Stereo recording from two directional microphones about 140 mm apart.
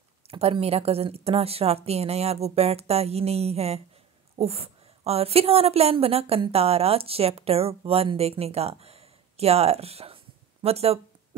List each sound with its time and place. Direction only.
0.3 s a woman's voice: 45° right (ahead or behind)